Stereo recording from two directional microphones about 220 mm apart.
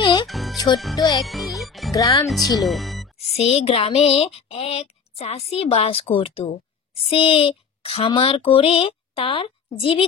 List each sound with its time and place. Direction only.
0.0 s music: 20° left (ahead or behind)
0.3 s music: centre (ahead or behind)
0.9 s speech: 15° left (ahead or behind)
1.2 s speech: centre (ahead or behind)
1.9 s speech: 15° left (ahead or behind)
2.2 s speech: centre (ahead or behind)
3.3 s speech: 25° left (ahead or behind)
7.0 s a sound: 25° left (ahead or behind)